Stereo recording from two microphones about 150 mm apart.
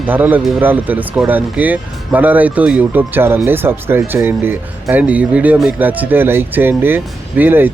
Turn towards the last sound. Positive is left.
turn(degrees=-15)  # may be behind; listen again after turning